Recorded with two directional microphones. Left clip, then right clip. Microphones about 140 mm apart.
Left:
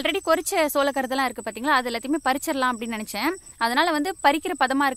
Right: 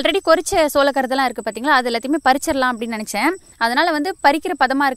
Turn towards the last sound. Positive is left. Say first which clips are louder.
# right 5 dB
turn(degrees=-30)  # may be behind; listen again after turning